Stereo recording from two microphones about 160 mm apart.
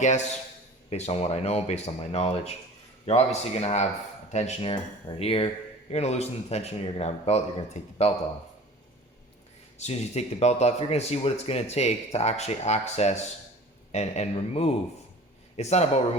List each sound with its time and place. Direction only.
0.0 s speech: 45° left (ahead or behind)
4.7 s speech: 35° left (ahead or behind)
9.7 s speech: 45° left (ahead or behind)